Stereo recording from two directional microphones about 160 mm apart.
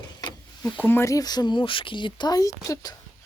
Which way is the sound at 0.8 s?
15° left (ahead or behind).